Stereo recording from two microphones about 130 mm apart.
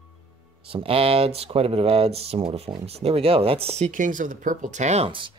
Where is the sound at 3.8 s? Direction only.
80° right; by 5.1 s 60° right (ahead or behind).